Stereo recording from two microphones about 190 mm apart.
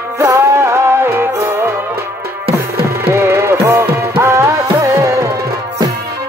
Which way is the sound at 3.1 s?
15° right (ahead or behind).